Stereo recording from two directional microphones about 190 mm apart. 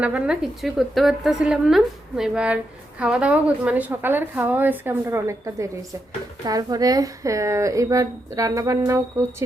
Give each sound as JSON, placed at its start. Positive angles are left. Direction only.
{"t": 0.0, "sound": "a woman's voice", "side_deg": -5}